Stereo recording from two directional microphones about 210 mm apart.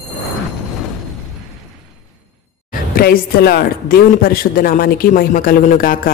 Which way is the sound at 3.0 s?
45° left (ahead or behind).